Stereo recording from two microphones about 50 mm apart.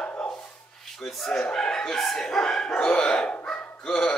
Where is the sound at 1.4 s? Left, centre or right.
Centre.